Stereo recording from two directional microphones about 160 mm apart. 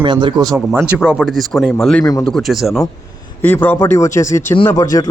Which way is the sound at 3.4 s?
10° left (ahead or behind).